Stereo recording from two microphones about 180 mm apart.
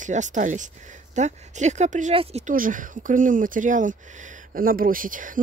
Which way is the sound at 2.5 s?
50° right (ahead or behind).